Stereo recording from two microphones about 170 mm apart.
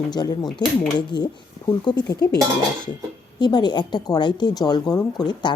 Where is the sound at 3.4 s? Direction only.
25° left (ahead or behind).